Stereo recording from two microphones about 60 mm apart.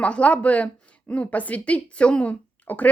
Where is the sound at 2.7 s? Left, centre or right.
Left.